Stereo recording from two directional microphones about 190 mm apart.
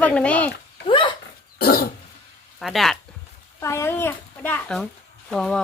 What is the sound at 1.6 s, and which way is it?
Dog, 50° left (ahead or behind).